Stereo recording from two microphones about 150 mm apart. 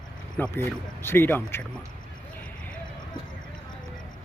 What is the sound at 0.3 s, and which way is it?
Speech, 10° left (ahead or behind).